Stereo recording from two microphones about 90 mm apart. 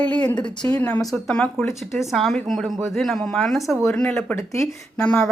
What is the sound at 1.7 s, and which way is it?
Speech, centre (ahead or behind).